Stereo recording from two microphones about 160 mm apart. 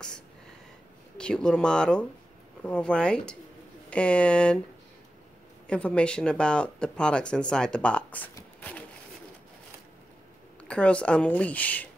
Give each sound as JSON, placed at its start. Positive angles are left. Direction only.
{"t": 1.1, "sound": "speech", "side_deg": 5}
{"t": 5.7, "sound": "speech", "side_deg": 5}
{"t": 8.4, "sound": "a sound", "side_deg": 10}
{"t": 10.6, "sound": "speech", "side_deg": 10}